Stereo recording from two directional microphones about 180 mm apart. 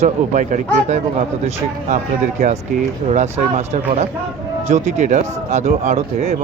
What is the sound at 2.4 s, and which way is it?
Speech, 40° right (ahead or behind).